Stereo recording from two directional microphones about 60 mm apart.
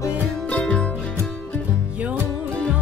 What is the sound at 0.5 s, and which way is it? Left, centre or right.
Music, left.